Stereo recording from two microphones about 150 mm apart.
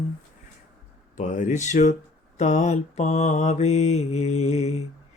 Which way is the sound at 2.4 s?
50° left (ahead or behind).